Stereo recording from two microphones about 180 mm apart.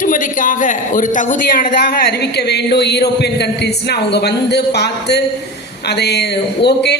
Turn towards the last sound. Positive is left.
turn(degrees=70)  # may be behind; listen again after turning